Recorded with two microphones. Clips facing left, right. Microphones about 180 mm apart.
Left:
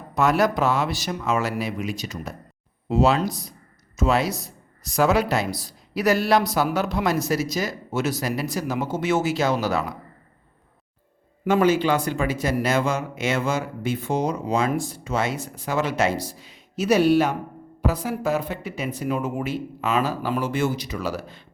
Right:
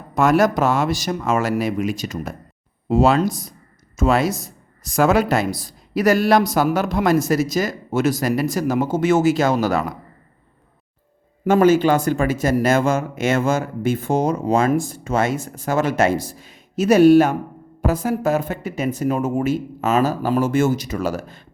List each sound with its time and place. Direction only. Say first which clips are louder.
0.1 s speech: right 4 dB; 50° right (ahead or behind)
11.4 s speech: right 5 dB; 45° right (ahead or behind)